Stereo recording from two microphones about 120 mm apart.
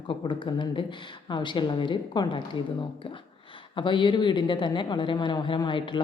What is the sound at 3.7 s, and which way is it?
A woman's voice, 45° left (ahead or behind).